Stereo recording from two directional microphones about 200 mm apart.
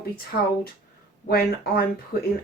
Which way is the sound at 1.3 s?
50° left (ahead or behind).